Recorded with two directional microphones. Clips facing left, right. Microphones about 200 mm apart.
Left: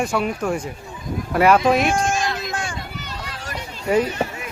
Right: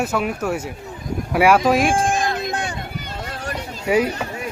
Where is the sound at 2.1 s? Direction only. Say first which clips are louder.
Right 2 dB; 55° right (ahead or behind).